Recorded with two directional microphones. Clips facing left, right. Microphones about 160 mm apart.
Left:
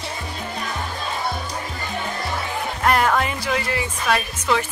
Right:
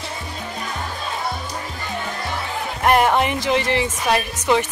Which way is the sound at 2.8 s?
20° right (ahead or behind).